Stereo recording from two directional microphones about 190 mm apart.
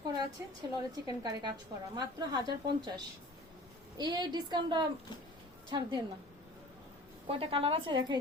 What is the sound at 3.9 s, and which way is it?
Speech, 20° right (ahead or behind).